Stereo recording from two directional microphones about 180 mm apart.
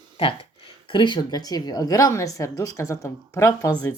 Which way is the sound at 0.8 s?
25° left (ahead or behind).